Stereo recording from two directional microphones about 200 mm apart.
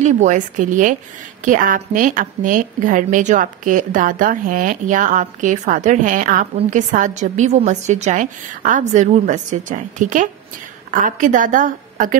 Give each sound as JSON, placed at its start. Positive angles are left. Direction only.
{"t": 0.0, "sound": "a woman's voice", "side_deg": -35}